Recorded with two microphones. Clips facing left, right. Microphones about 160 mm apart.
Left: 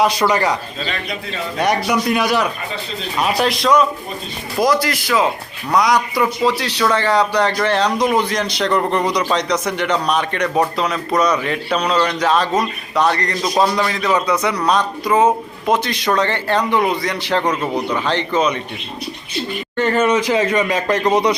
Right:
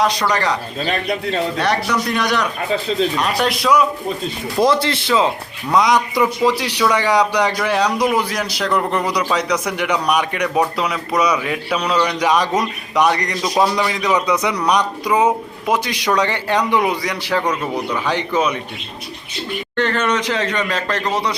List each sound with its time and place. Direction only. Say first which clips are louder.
0.0 s speech: left 2 dB; 5° left (ahead or behind)
1.5 s a man's voice: left 1 dB; 10° left (ahead or behind); by 3.8 s 5° right (ahead or behind)
4.6 s a man's voice: right 1 dB; 30° right (ahead or behind); by 17.4 s 10° right (ahead or behind)
17.5 s speech: left 2 dB; 10° left (ahead or behind)
18.0 s a man's voice: even; 10° right (ahead or behind)
19.7 s speech: left 3 dB; 10° left (ahead or behind)